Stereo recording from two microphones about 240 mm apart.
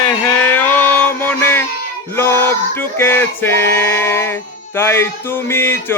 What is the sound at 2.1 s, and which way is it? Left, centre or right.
Male singing, centre.